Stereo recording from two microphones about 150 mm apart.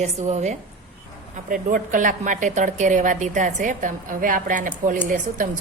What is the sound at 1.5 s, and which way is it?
A woman's voice, 65° right (ahead or behind).